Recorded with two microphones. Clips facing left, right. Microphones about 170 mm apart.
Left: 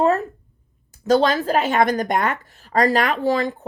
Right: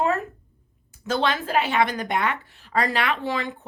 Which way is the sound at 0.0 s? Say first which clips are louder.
Left 5 dB; 35° left (ahead or behind).